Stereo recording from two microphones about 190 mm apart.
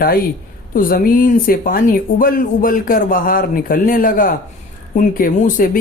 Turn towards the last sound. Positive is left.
turn(degrees=45)  # may be behind; listen again after turning